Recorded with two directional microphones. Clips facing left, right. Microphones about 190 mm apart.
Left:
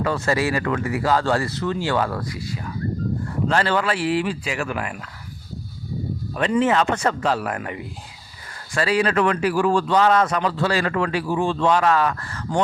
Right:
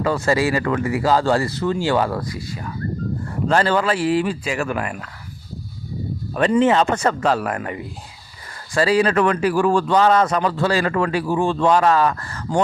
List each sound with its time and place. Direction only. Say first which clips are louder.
0.0 s speech: right 3 dB; 25° right (ahead or behind)
3.5 s a man's voice: right 4 dB; 40° right (ahead or behind)
6.3 s speech: right 4 dB; 40° right (ahead or behind)
6.6 s speech: right 3 dB; 30° right (ahead or behind)
6.9 s a man's voice: right 3 dB; 45° right (ahead or behind)